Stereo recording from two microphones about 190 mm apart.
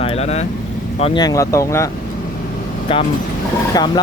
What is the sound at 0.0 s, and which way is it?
Vehicle, 30° left (ahead or behind).